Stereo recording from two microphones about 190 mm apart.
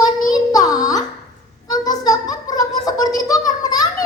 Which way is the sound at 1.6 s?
20° left (ahead or behind).